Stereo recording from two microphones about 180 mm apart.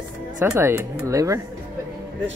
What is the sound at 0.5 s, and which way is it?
Speech, 15° right (ahead or behind).